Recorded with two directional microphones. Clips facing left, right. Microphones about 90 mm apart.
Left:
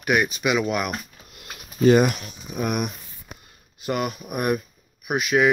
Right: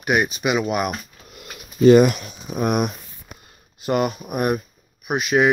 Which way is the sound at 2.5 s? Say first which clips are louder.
Right 5 dB; 40° right (ahead or behind).